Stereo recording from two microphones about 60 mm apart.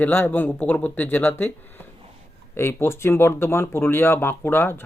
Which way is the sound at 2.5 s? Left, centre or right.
Left.